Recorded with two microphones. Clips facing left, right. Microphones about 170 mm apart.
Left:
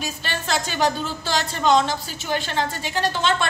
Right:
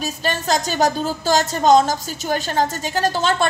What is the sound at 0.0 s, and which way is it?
A woman's voice, 40° right (ahead or behind).